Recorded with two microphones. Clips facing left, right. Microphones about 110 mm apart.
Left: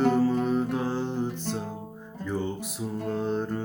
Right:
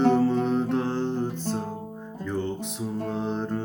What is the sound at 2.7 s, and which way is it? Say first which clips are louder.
Music: left 1 dB; centre (ahead or behind).